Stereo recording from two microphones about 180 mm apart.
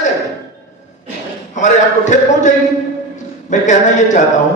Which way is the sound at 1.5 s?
45° left (ahead or behind).